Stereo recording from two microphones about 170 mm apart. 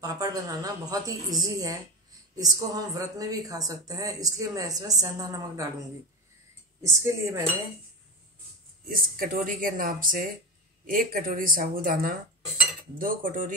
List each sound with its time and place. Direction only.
0.0 s speech: 20° right (ahead or behind)
6.8 s speech: 15° right (ahead or behind)
8.8 s speech: 55° right (ahead or behind)